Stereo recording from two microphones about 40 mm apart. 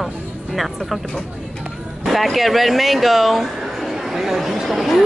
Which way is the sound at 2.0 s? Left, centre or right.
Centre.